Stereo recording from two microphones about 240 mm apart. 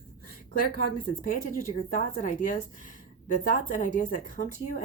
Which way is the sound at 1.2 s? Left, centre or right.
Left.